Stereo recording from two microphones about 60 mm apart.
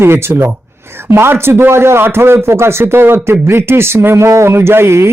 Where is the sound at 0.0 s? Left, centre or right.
Right.